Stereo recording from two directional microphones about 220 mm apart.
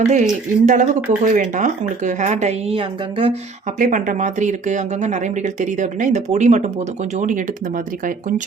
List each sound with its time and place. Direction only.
0.1 s speech: 35° right (ahead or behind)
3.8 s speech: 35° right (ahead or behind)